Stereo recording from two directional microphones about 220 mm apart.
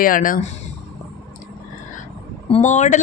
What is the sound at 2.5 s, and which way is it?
Speech, 35° left (ahead or behind).